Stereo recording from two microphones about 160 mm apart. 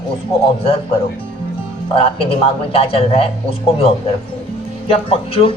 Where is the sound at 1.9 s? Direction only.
35° left (ahead or behind).